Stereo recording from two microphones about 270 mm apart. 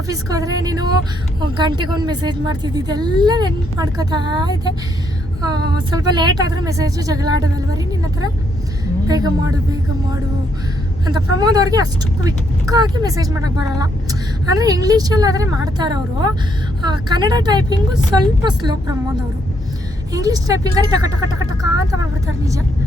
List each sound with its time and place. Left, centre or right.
0.1 s speech: centre
11.3 s speech: centre
20.1 s speech: centre